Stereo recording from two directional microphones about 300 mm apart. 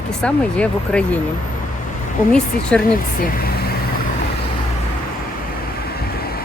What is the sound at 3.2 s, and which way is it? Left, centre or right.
Vehicle, left.